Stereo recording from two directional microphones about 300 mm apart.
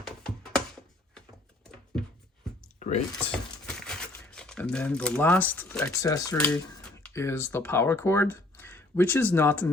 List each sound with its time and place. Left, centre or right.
0.0 s music: centre
2.7 s a sound: left
3.7 s speech: centre